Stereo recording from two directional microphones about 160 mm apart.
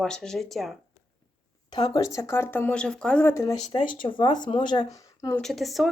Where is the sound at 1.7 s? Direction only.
25° left (ahead or behind).